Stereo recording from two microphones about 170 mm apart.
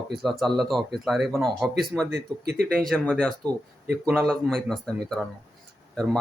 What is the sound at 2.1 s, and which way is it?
Speech, 65° right (ahead or behind).